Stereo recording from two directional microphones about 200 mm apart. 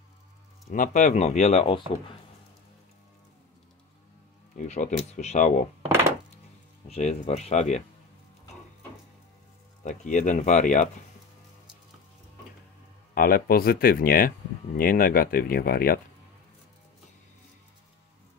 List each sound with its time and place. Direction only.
0.7 s speech: 40° left (ahead or behind)
4.6 s speech: 35° left (ahead or behind)
6.9 s speech: 35° left (ahead or behind)
9.8 s speech: 40° left (ahead or behind)
13.1 s speech: 45° left (ahead or behind)